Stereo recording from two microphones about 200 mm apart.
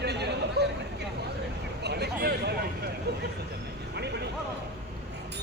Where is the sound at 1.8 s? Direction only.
55° right (ahead or behind).